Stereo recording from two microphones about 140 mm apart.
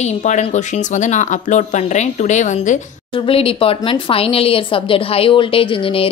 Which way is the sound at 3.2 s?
40° left (ahead or behind).